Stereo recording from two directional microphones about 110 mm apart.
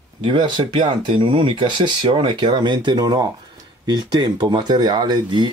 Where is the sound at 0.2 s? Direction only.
50° right (ahead or behind).